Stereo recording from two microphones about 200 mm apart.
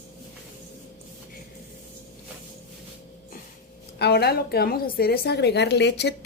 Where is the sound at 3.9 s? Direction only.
55° left (ahead or behind).